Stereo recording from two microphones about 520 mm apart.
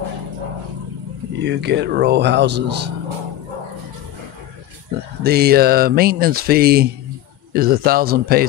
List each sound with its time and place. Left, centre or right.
1.4 s speech: centre
5.2 s speech: centre